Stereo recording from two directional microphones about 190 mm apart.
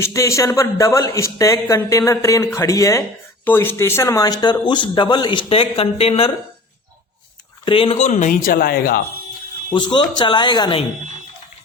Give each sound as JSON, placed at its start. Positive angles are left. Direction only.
{"t": 0.0, "sound": "speech", "side_deg": 15}
{"t": 7.6, "sound": "speech", "side_deg": 25}
{"t": 9.6, "sound": "speech", "side_deg": 25}